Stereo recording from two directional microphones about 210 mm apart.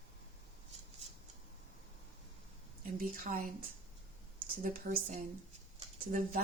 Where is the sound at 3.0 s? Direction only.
40° right (ahead or behind).